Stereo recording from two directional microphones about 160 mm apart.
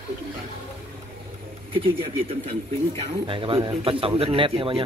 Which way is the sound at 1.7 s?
35° right (ahead or behind).